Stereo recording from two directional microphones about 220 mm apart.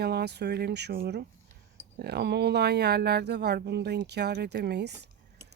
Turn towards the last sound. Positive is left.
turn(degrees=-50)  # may be behind; listen again after turning